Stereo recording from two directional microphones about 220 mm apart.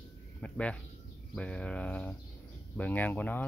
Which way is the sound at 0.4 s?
5° left (ahead or behind).